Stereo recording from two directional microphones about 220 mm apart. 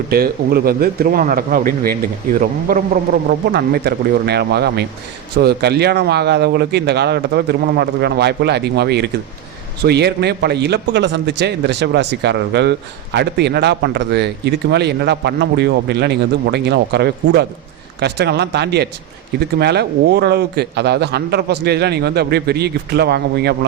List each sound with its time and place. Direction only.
0.1 s a man's voice: 45° right (ahead or behind)